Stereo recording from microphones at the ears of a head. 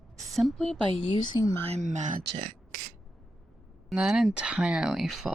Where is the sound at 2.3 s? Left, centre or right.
Right.